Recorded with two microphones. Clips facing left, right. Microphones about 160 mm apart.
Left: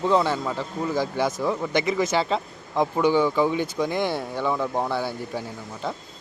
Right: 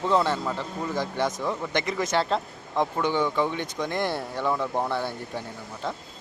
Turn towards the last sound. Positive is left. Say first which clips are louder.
# left 2 dB
turn(degrees=5)  # may be behind; listen again after turning